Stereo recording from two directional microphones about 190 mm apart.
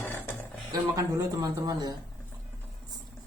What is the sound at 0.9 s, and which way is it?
Speech, 20° right (ahead or behind).